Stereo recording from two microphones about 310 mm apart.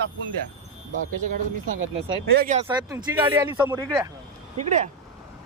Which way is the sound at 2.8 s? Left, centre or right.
Centre.